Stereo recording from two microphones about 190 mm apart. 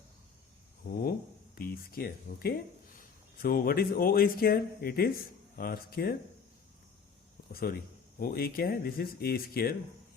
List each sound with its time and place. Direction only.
1.5 s speech: 50° left (ahead or behind)
7.5 s speech: 50° left (ahead or behind)